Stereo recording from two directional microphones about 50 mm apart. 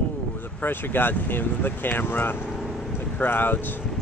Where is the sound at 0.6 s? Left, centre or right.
Left.